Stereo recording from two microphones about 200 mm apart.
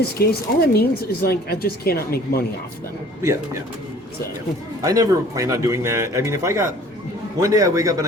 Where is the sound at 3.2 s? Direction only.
15° right (ahead or behind).